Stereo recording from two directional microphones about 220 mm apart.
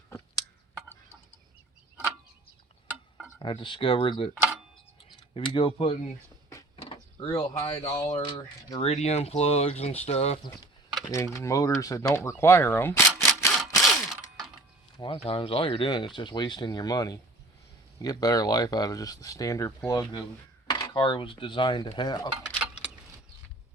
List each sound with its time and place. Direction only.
3.3 s speech: 20° left (ahead or behind)
5.3 s speech: 25° left (ahead or behind)
11.1 s speech: 15° left (ahead or behind)
13.5 s a sound: centre (ahead or behind)
14.9 s speech: 25° left (ahead or behind)